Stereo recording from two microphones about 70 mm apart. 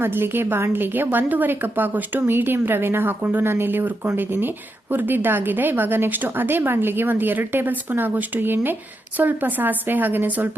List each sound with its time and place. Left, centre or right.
0.0 s a woman's voice: right